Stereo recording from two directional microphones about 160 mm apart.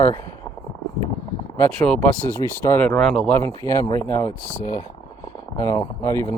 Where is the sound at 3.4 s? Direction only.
20° left (ahead or behind).